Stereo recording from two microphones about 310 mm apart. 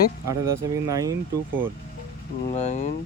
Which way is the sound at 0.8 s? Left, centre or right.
Centre.